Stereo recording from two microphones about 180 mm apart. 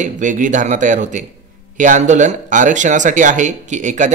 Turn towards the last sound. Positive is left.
turn(degrees=-45)  # may be behind; listen again after turning